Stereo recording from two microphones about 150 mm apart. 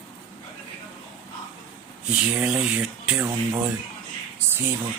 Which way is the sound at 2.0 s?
5° right (ahead or behind).